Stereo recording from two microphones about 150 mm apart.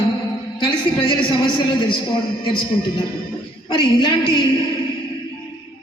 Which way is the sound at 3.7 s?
35° left (ahead or behind).